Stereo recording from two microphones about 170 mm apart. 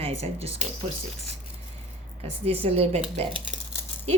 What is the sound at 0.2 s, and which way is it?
Speech, 35° right (ahead or behind).